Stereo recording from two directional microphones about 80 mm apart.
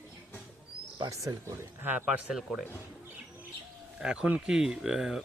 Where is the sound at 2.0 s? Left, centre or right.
Centre.